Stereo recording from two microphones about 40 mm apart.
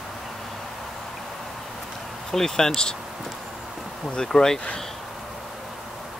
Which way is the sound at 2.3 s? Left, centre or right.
Centre.